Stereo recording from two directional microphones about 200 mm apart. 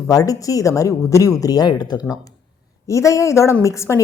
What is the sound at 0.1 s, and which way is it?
A woman's voice, 15° left (ahead or behind).